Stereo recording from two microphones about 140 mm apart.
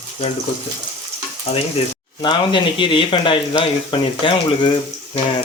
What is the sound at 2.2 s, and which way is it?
Speech, 35° left (ahead or behind).